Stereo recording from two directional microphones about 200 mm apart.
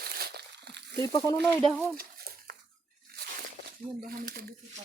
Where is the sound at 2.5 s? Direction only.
50° right (ahead or behind).